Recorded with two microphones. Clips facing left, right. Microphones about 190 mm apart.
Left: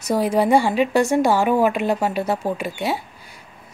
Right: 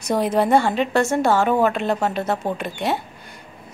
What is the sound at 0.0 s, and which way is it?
A woman's voice, 5° left (ahead or behind).